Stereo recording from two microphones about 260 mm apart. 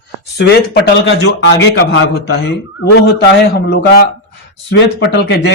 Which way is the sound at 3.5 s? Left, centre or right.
Left.